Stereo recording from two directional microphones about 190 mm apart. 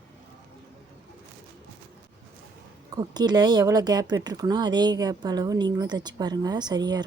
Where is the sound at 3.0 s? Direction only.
20° right (ahead or behind).